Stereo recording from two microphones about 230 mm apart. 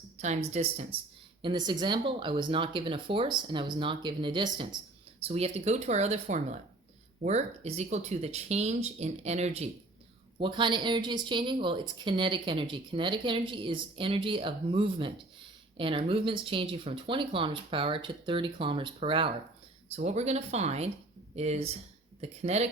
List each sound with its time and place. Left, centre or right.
0.2 s speech: right